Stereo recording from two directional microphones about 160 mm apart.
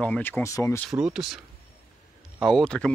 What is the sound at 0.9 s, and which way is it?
Speech, 5° right (ahead or behind).